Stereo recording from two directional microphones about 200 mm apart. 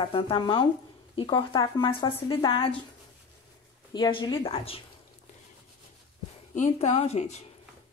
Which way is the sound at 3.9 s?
25° left (ahead or behind).